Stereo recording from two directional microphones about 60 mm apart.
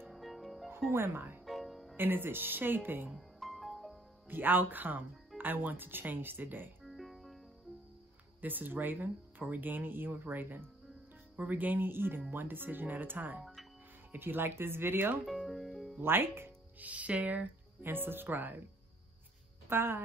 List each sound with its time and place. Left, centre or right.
0.1 s music: centre
0.7 s speech: right
1.4 s music: centre
2.0 s speech: right
3.2 s music: centre
4.3 s speech: right
6.9 s cricket: centre
8.4 s speech: right
15.2 s speech: centre
16.0 s speech: right
16.8 s speech: right
19.7 s speech: right